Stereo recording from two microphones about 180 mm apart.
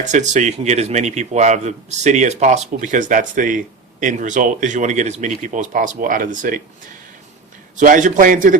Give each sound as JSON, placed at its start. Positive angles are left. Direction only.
{"t": 0.0, "sound": "speech", "side_deg": -40}
{"t": 7.8, "sound": "speech", "side_deg": -45}